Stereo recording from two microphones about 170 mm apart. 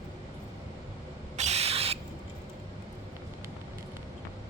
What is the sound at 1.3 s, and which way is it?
Owl, 40° right (ahead or behind).